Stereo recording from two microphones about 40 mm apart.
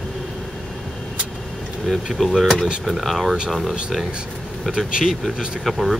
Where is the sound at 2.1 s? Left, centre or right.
Centre.